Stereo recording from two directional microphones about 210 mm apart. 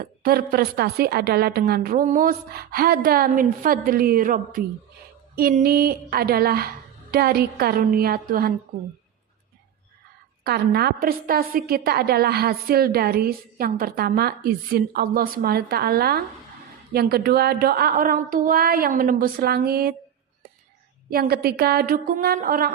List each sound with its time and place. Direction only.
0.0 s a woman's voice: 45° right (ahead or behind)
10.4 s a woman's voice: 50° right (ahead or behind)
21.1 s a woman's voice: 45° right (ahead or behind)